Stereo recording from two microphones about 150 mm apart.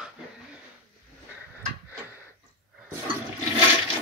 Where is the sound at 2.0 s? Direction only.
15° right (ahead or behind).